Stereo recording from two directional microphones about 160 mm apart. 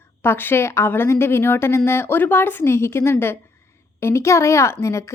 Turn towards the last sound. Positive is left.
turn(degrees=20)  # may be behind; listen again after turning